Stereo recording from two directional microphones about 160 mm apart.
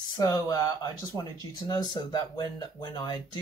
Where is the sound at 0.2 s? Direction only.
20° left (ahead or behind).